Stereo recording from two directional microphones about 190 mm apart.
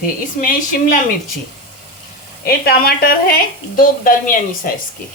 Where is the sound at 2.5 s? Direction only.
55° left (ahead or behind).